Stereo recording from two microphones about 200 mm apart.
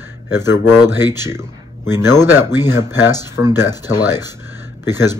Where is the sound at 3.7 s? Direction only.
20° left (ahead or behind).